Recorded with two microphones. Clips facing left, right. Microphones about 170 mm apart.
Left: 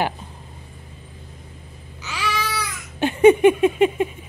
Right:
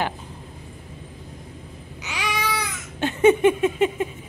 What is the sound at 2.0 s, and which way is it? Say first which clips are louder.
Babbling: left 1 dB; 15° right (ahead or behind).